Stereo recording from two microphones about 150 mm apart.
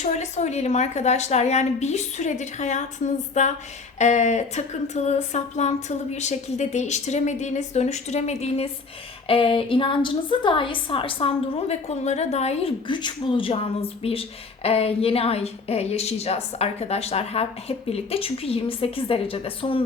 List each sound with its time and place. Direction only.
0.0 s a woman's voice: 50° left (ahead or behind)